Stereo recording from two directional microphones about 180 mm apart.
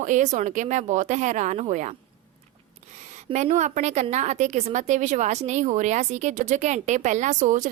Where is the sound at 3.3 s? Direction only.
40° right (ahead or behind).